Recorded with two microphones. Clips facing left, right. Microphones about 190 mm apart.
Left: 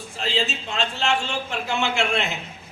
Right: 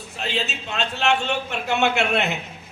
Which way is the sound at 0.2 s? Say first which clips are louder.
Left 1 dB; 65° right (ahead or behind).